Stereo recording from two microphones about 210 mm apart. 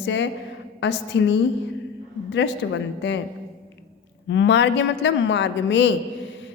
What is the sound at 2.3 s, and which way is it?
Speech, 60° left (ahead or behind).